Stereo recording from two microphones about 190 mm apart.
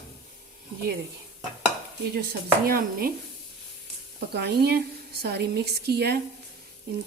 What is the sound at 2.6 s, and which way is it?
Speech, 50° right (ahead or behind).